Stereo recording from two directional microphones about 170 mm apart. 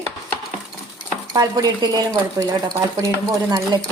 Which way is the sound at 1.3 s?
20° right (ahead or behind).